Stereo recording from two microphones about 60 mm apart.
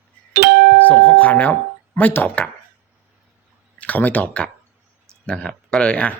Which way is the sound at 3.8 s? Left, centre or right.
Left.